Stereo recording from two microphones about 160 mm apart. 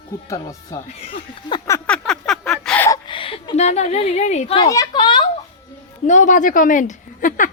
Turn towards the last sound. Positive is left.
turn(degrees=55)  # may be behind; listen again after turning